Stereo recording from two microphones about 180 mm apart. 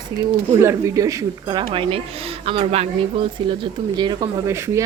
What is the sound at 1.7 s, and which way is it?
A woman's voice, 30° right (ahead or behind).